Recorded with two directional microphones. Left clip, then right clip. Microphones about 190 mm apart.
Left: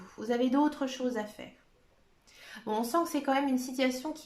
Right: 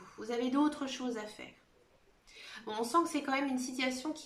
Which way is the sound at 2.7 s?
35° left (ahead or behind).